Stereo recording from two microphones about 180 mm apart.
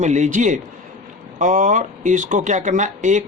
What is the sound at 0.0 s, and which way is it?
A man's voice, 40° right (ahead or behind).